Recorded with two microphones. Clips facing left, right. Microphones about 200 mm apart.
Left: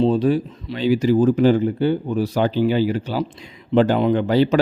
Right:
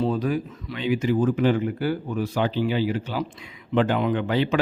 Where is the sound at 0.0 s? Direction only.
30° left (ahead or behind).